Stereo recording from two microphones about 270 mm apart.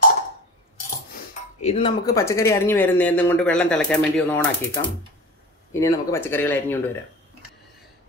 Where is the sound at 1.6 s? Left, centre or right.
Left; by 4.5 s centre.